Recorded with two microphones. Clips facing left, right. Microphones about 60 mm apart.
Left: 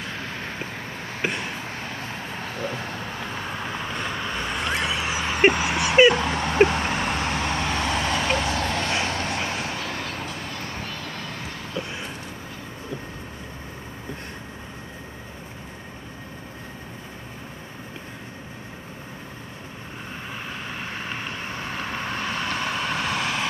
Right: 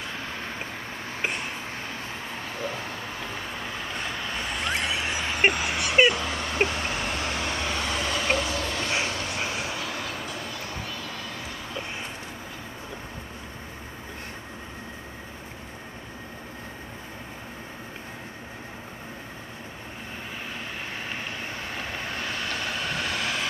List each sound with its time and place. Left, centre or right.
2.7 s vehicle: centre
5.7 s a sound: centre
6.1 s vehicle: centre
8.5 s a sound: centre
8.9 s vehicle: centre
20.8 s vehicle: centre